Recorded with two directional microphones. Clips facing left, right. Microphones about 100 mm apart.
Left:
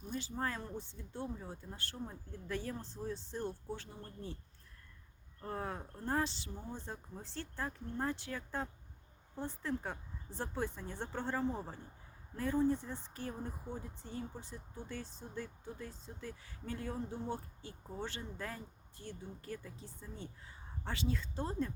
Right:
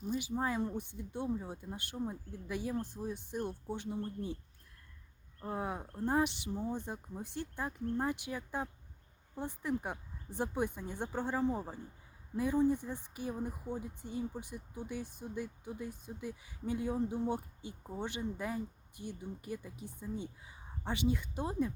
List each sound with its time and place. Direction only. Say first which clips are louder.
0.1 s speech: right 4 dB; 15° right (ahead or behind)
5.4 s speech: right 3 dB; 15° right (ahead or behind)